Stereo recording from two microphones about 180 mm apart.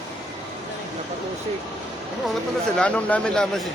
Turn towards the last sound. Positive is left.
turn(degrees=0)  # may be behind; listen again after turning